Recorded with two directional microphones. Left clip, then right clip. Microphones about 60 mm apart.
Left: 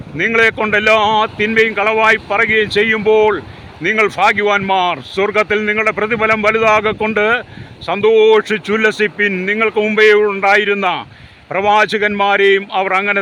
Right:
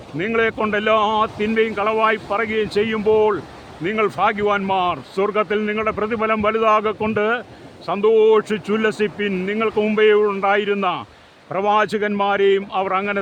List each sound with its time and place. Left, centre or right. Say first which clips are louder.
0.2 s speech: left 7 dB; left
9.5 s speech: left 6 dB; left